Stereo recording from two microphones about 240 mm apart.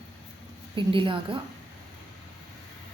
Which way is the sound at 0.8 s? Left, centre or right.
Right.